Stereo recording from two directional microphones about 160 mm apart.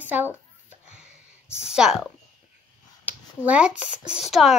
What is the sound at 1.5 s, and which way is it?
Speech, 5° right (ahead or behind).